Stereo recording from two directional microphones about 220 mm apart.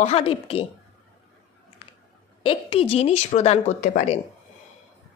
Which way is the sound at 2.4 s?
25° left (ahead or behind).